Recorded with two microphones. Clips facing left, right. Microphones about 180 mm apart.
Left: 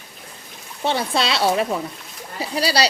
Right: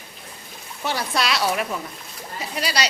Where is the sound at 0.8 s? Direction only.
25° left (ahead or behind).